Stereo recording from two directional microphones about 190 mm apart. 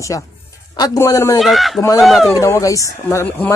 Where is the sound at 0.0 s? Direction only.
15° left (ahead or behind).